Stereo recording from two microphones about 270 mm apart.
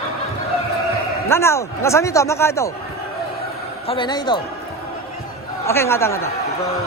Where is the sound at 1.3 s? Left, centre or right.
Centre.